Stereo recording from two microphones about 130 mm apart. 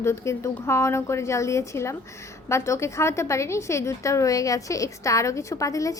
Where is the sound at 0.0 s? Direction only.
20° left (ahead or behind).